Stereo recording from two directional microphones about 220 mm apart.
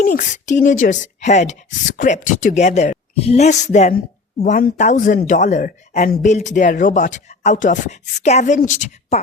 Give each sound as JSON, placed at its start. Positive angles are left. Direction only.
{"t": 0.0, "sound": "speech", "side_deg": 35}